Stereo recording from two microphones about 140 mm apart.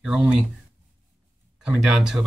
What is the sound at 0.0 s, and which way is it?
Speech, 5° right (ahead or behind).